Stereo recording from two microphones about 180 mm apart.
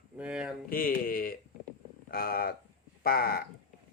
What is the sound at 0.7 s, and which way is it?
A man's voice, 50° left (ahead or behind).